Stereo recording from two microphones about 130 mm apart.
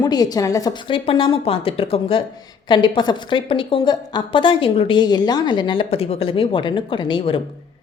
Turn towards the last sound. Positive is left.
turn(degrees=40)  # may be behind; listen again after turning